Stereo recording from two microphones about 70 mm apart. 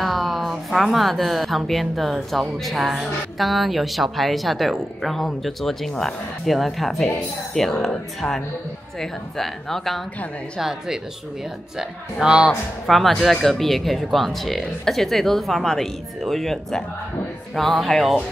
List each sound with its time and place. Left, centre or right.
0.0 s a sound: centre
1.7 s speech: centre
12.2 s speech: centre